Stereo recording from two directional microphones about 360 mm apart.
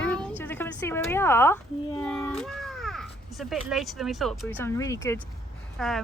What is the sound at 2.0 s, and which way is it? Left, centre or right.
Cat, centre.